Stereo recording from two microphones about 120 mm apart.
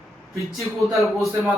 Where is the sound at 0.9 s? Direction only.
25° left (ahead or behind).